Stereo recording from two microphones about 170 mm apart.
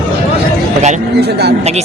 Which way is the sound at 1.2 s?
70° right (ahead or behind).